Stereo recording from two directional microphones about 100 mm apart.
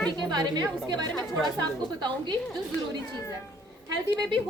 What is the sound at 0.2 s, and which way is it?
A woman's voice, 45° right (ahead or behind).